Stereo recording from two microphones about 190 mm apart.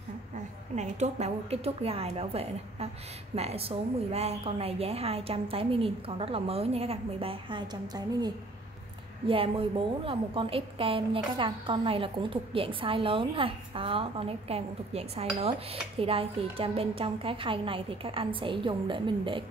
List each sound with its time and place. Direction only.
0.7 s a woman's voice: 35° right (ahead or behind); by 8.3 s 20° right (ahead or behind)
9.3 s a woman's voice: 30° right (ahead or behind)